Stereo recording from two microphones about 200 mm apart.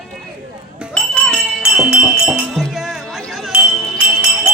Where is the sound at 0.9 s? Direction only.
5° left (ahead or behind).